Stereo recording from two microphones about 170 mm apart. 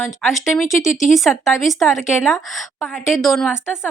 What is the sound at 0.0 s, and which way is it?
Speech, centre (ahead or behind).